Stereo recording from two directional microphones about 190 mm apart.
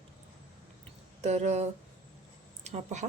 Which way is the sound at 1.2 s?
35° right (ahead or behind).